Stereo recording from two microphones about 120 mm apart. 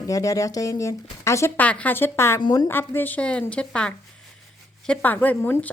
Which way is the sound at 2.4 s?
35° left (ahead or behind).